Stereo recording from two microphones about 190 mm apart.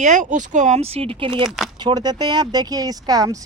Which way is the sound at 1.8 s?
20° right (ahead or behind).